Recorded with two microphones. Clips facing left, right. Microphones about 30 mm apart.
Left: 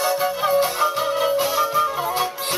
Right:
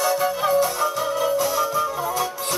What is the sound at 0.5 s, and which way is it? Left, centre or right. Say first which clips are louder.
Music: left 1 dB; left.